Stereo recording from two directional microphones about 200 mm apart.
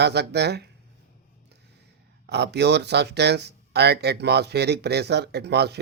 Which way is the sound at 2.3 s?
55° right (ahead or behind).